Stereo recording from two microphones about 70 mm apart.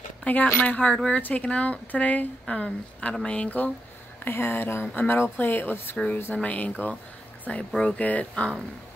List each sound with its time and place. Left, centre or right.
0.2 s speech: left
7.7 s speech: centre
8.0 s speech: left